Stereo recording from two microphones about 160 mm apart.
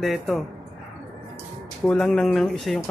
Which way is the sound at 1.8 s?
5° left (ahead or behind).